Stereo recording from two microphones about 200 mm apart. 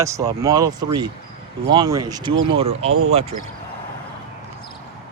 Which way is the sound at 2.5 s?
30° right (ahead or behind).